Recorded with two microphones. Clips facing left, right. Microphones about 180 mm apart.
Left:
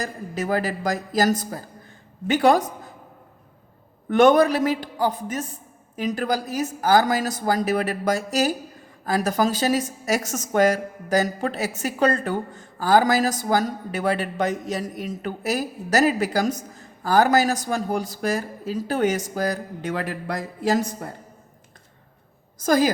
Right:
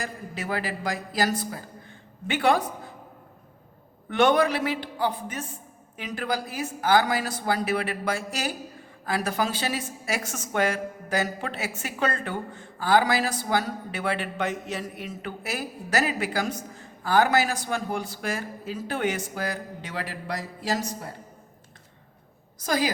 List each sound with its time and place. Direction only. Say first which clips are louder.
0.0 s a woman's voice: left 6 dB; 40° left (ahead or behind)
4.1 s a woman's voice: left 5 dB; 45° left (ahead or behind)
22.5 s a woman's voice: left 7 dB; 45° left (ahead or behind)